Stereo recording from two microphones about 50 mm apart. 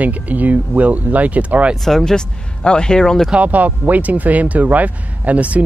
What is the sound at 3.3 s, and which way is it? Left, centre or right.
Speech, right.